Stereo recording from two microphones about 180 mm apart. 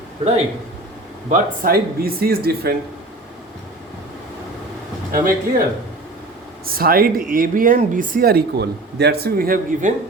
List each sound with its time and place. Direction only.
1.3 s speech: 55° right (ahead or behind)
5.1 s speech: 50° right (ahead or behind)
6.7 s speech: 55° right (ahead or behind)